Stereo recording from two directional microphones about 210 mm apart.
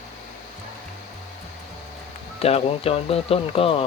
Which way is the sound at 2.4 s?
30° left (ahead or behind).